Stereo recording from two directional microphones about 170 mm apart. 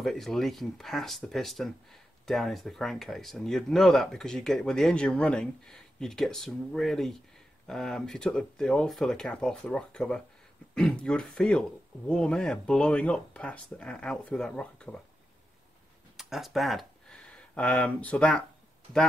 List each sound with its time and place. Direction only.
0.0 s speech: centre (ahead or behind)
16.2 s speech: centre (ahead or behind)